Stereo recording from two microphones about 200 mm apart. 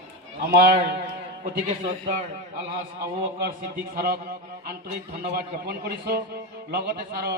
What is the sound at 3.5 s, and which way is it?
Speech, 45° right (ahead or behind).